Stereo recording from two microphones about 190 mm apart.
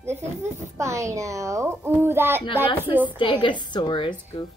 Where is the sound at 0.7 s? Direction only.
15° right (ahead or behind).